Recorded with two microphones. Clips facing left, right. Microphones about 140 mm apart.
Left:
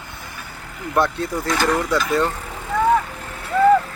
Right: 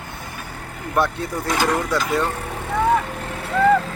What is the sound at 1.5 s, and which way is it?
Speech, 15° right (ahead or behind).